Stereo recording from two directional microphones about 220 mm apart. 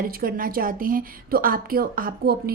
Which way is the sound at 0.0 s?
40° right (ahead or behind).